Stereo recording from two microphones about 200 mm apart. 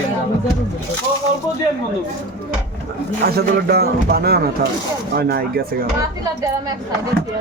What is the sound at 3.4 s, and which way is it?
Speech, 50° right (ahead or behind).